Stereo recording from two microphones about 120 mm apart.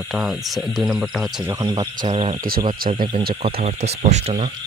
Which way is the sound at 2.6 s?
40° right (ahead or behind).